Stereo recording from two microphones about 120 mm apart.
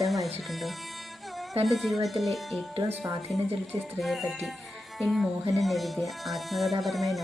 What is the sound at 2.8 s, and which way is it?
Speech, 25° right (ahead or behind).